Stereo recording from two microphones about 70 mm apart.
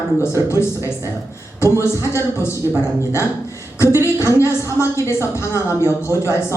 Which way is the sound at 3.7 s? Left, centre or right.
Left.